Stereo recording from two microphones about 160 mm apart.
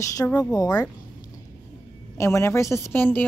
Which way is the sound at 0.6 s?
25° left (ahead or behind).